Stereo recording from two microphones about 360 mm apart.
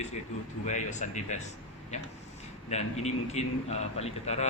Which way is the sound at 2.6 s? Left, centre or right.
Centre.